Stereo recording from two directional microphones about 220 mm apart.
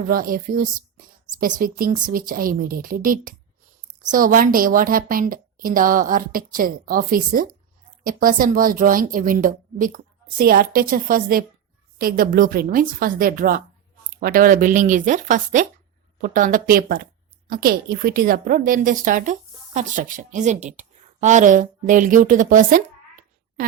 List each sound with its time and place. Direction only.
0.1 s a woman's voice: 40° right (ahead or behind)